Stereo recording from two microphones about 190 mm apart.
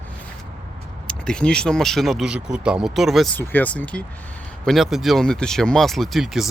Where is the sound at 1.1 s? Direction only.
5° left (ahead or behind).